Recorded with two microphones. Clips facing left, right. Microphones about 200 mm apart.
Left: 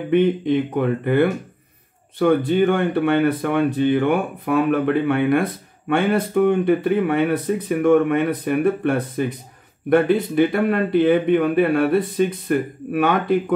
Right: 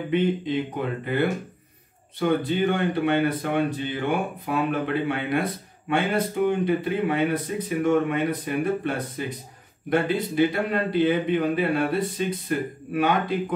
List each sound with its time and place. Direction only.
0.1 s speech: 55° left (ahead or behind)